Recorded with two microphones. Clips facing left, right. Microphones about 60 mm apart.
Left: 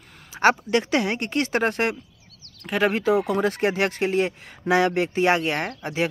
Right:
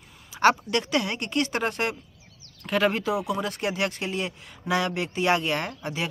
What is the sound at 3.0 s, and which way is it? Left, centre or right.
Speech, left.